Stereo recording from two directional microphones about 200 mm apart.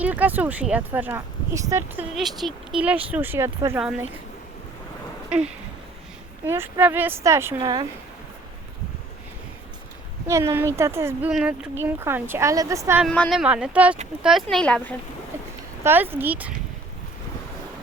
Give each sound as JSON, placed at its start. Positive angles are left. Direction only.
{"t": 0.0, "sound": "speech", "side_deg": -10}
{"t": 2.1, "sound": "speech", "side_deg": 0}
{"t": 6.4, "sound": "speech", "side_deg": -10}
{"t": 10.2, "sound": "speech", "side_deg": -15}
{"t": 13.1, "sound": "speech", "side_deg": 5}
{"t": 13.4, "sound": "speech", "side_deg": -5}
{"t": 15.8, "sound": "speech", "side_deg": -10}